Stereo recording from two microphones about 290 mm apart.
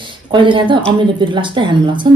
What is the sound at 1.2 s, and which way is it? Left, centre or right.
Speech, centre.